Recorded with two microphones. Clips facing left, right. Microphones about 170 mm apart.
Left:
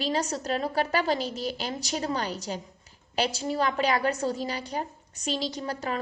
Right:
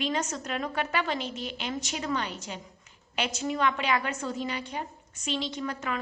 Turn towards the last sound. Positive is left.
turn(degrees=35)  # may be behind; listen again after turning